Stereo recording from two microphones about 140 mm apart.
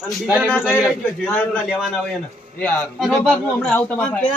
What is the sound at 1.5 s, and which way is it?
A man's voice, 5° right (ahead or behind).